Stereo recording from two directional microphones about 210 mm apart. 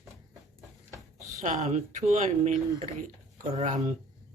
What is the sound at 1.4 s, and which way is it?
Speech, 35° right (ahead or behind).